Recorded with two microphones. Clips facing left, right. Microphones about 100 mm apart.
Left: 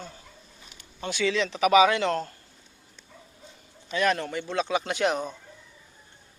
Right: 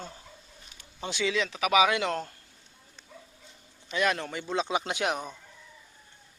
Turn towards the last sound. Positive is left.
turn(degrees=-5)  # may be behind; listen again after turning